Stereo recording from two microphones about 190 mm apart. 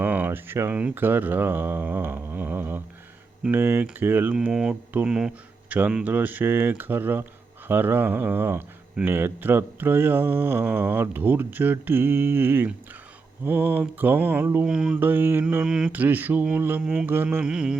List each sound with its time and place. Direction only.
0.0 s speech: 10° right (ahead or behind)